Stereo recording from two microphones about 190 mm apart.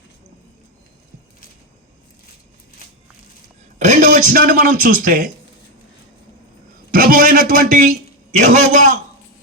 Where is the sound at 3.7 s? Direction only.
40° right (ahead or behind).